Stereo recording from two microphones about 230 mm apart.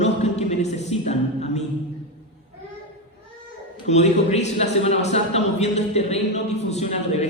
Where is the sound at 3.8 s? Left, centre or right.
Left.